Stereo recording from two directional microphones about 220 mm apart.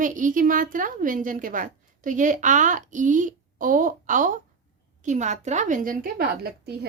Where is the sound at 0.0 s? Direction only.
35° right (ahead or behind).